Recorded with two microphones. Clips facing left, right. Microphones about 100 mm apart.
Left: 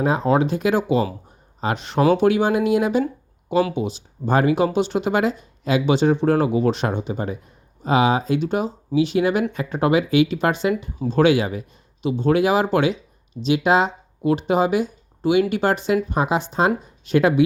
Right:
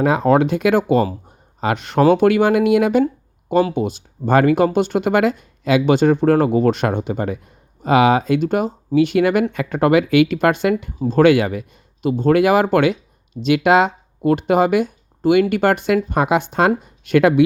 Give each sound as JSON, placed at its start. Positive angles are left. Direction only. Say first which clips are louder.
{"t": 0.0, "sound": "speech", "louder": "right 4 dB", "side_deg": -65}
{"t": 3.8, "sound": "speech", "louder": "right 4 dB", "side_deg": -55}
{"t": 5.8, "sound": "speech", "louder": "right 3 dB", "side_deg": -50}
{"t": 8.4, "sound": "speech", "louder": "right 4 dB", "side_deg": -50}
{"t": 12.0, "sound": "speech", "louder": "right 4 dB", "side_deg": -45}